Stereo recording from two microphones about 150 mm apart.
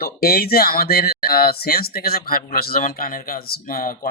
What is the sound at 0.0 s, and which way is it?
Speech, 90° left.